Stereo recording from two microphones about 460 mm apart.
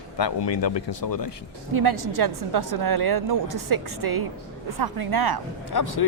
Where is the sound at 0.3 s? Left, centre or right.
Left.